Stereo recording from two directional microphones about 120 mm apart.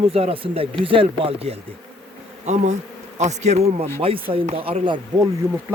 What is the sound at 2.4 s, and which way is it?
Speech, 70° right (ahead or behind).